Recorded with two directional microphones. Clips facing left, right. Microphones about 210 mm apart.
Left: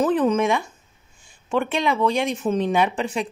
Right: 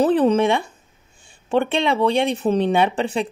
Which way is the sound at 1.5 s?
30° right (ahead or behind).